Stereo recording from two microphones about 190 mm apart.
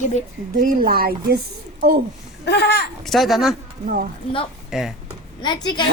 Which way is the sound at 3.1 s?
Centre (ahead or behind).